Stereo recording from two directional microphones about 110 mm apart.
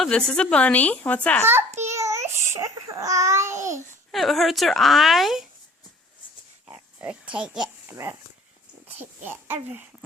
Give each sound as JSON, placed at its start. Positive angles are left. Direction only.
{"t": 0.0, "sound": "speech", "side_deg": 5}
{"t": 1.5, "sound": "a child's voice", "side_deg": -20}
{"t": 4.1, "sound": "speech", "side_deg": 0}
{"t": 7.0, "sound": "a child's voice", "side_deg": -10}
{"t": 7.9, "sound": "a child's voice", "side_deg": -25}